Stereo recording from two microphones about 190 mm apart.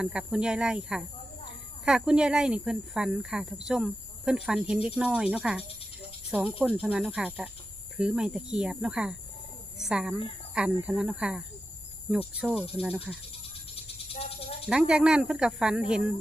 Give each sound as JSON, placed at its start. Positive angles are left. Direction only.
{"t": 0.0, "sound": "speech", "side_deg": -5}
{"t": 14.1, "sound": "cricket", "side_deg": 30}
{"t": 14.7, "sound": "speech", "side_deg": -5}